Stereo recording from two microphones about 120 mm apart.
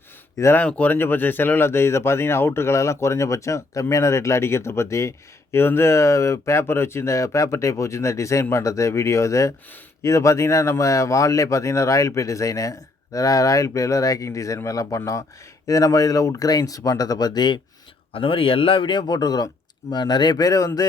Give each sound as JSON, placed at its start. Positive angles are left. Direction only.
{"t": 0.3, "sound": "speech", "side_deg": 25}
{"t": 0.6, "sound": "speech", "side_deg": 10}
{"t": 18.1, "sound": "a man's voice", "side_deg": 50}